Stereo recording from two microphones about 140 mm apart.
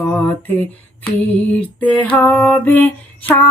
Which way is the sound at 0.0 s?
10° left (ahead or behind).